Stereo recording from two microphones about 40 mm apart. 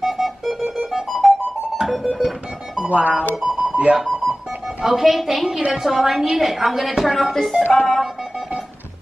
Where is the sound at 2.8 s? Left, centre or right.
Right.